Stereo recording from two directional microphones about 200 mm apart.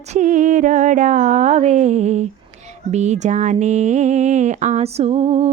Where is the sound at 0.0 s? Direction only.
35° right (ahead or behind).